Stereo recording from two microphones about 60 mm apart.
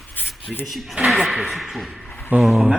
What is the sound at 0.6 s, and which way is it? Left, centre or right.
Speech, centre.